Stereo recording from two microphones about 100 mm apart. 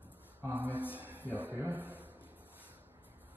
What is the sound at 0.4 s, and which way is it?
Speech, 20° right (ahead or behind).